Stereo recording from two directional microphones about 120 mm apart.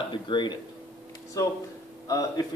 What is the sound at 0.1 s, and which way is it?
Speech, 40° left (ahead or behind).